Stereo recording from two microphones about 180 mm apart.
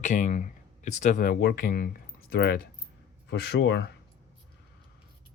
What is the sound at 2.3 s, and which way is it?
Speech, 65° left (ahead or behind).